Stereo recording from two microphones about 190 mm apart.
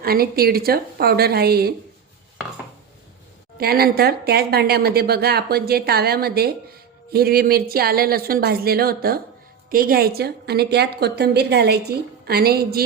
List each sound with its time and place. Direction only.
0.0 s a woman's voice: 50° right (ahead or behind)
3.6 s speech: 55° right (ahead or behind)